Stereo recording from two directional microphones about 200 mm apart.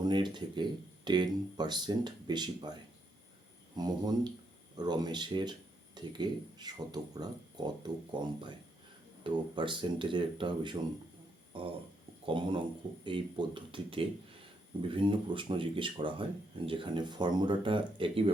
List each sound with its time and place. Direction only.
0.0 s speech: 20° right (ahead or behind)
3.8 s speech: 20° right (ahead or behind)